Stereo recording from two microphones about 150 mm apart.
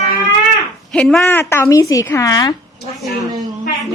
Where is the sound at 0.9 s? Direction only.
Centre (ahead or behind).